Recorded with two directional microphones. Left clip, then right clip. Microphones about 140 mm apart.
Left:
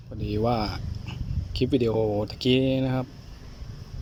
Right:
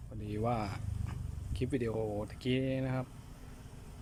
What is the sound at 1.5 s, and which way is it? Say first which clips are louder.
Speech: left 12 dB; 15° left (ahead or behind).